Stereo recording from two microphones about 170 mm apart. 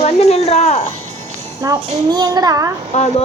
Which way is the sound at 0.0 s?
40° left (ahead or behind).